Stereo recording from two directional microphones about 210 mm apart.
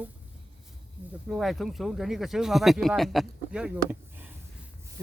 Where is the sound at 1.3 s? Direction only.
Centre (ahead or behind).